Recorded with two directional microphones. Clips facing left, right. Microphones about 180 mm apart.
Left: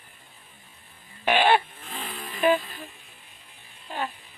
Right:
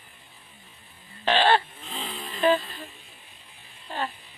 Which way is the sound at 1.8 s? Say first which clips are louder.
Right 1 dB; centre (ahead or behind).